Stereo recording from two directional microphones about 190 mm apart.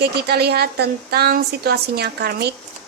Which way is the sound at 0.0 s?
55° right (ahead or behind).